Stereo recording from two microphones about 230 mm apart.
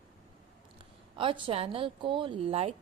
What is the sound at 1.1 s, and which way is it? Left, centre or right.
A woman's voice, right.